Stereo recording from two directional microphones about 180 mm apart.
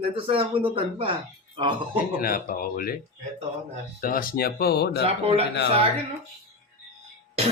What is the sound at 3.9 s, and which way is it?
Speech, 50° left (ahead or behind).